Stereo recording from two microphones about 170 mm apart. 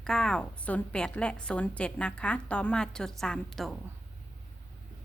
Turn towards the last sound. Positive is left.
turn(degrees=0)  # may be behind; listen again after turning